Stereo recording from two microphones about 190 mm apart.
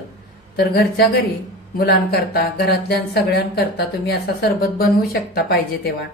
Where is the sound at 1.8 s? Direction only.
55° left (ahead or behind).